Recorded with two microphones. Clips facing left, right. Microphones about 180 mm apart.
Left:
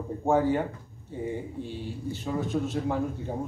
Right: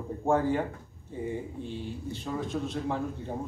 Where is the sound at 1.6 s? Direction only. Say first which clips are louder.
Left 2 dB; 5° left (ahead or behind).